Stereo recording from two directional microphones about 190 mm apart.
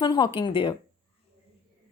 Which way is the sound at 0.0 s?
25° left (ahead or behind).